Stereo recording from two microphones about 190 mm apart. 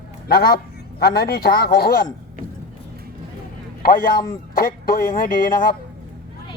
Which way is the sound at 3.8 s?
50° left (ahead or behind).